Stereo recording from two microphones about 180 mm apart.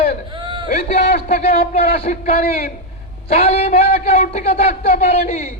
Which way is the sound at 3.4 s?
35° left (ahead or behind).